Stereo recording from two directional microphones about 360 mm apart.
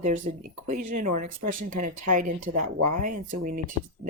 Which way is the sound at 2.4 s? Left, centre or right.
Right.